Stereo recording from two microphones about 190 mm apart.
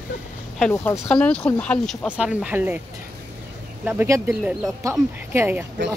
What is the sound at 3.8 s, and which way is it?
Speech, 10° right (ahead or behind).